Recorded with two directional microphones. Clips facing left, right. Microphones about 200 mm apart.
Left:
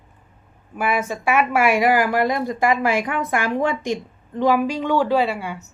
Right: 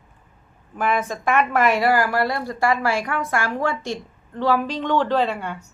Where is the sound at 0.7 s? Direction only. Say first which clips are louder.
Even; 10° left (ahead or behind).